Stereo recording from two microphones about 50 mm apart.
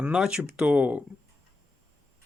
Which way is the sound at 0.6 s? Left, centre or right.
Right.